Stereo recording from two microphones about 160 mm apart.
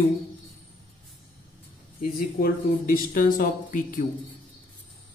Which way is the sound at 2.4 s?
60° left (ahead or behind).